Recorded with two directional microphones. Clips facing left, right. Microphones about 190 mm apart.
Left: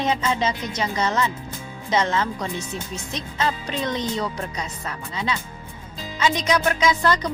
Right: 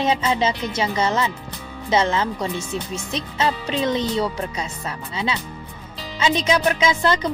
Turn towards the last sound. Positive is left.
turn(degrees=-25)  # may be behind; listen again after turning